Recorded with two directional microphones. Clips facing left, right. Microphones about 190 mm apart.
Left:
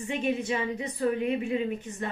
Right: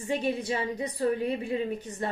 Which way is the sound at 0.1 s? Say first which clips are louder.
Even; 35° right (ahead or behind).